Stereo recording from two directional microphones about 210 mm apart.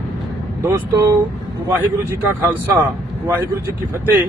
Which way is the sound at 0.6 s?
15° right (ahead or behind).